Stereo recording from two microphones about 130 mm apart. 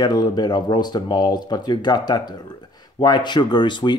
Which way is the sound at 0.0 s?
30° left (ahead or behind).